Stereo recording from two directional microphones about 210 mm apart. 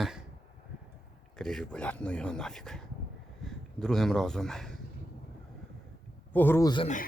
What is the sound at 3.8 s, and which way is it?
Speech, centre (ahead or behind).